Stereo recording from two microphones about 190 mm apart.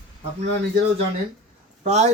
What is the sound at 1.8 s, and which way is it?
Speech, 35° right (ahead or behind).